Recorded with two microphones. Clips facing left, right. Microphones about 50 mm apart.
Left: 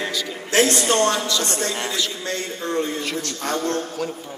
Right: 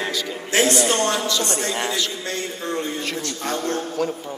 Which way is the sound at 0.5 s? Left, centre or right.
Right.